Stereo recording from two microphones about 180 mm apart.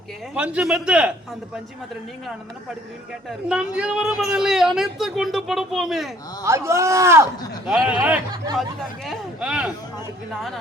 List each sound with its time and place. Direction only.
0.3 s speech: 5° right (ahead or behind)
3.2 s speech: 5° right (ahead or behind)
6.4 s speech: 15° right (ahead or behind)